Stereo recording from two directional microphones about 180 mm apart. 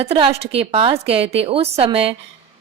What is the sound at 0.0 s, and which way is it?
Speech, 35° right (ahead or behind).